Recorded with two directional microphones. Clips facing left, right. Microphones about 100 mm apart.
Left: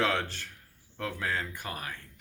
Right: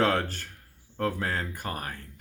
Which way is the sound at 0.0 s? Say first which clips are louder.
Right 4 dB; 45° right (ahead or behind).